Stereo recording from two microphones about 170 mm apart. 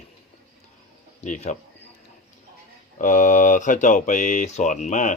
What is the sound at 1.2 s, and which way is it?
Speech, 45° left (ahead or behind).